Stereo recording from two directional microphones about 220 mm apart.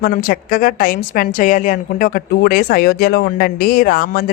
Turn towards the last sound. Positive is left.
turn(degrees=40)  # may be behind; listen again after turning